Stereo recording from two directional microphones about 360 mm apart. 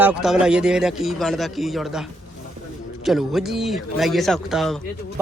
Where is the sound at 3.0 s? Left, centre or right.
Centre.